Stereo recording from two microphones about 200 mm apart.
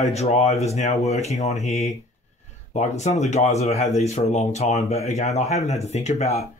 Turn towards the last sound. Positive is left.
turn(degrees=35)  # may be behind; listen again after turning